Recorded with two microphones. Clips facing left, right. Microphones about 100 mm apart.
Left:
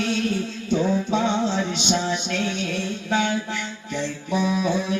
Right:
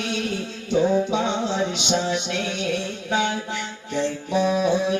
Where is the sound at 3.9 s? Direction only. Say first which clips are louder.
Right 3 dB; 25° right (ahead or behind).